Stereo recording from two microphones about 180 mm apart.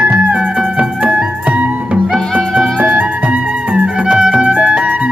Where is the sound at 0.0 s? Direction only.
10° right (ahead or behind).